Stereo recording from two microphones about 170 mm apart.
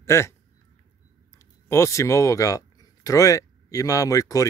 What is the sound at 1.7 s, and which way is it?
Speech, 15° left (ahead or behind).